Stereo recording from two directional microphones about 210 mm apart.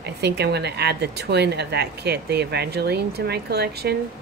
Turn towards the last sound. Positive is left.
turn(degrees=-50)  # may be behind; listen again after turning